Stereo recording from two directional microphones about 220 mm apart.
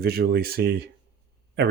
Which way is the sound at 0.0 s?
45° right (ahead or behind).